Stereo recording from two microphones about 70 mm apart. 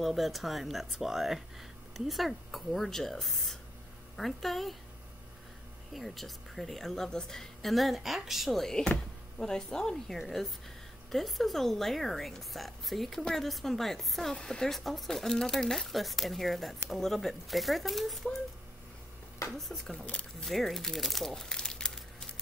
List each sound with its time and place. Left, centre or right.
0.0 s speech: centre
5.9 s speech: centre
19.5 s speech: centre
20.1 s speech: centre
20.4 s speech: centre